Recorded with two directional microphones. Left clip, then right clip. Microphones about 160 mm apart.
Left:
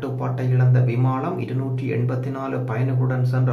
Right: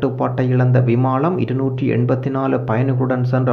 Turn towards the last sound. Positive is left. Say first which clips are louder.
# right 8 dB
turn(degrees=-35)  # may be behind; listen again after turning